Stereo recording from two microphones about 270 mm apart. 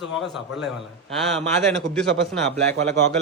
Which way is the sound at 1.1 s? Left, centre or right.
Centre.